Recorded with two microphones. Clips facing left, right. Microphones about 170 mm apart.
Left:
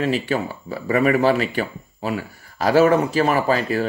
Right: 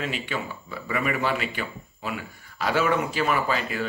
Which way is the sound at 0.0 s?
40° left (ahead or behind).